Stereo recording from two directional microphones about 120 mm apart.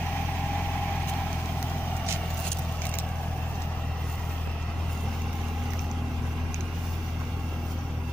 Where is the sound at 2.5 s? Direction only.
15° left (ahead or behind).